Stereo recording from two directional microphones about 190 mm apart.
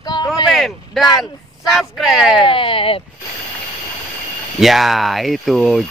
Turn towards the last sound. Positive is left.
turn(degrees=0)  # may be behind; listen again after turning